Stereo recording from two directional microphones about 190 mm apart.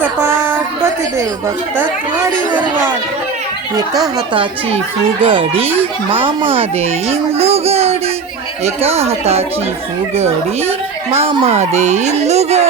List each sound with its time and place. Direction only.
0.0 s a sound: 10° right (ahead or behind)
5.2 s speech: 25° right (ahead or behind)
11.1 s speech: 30° right (ahead or behind)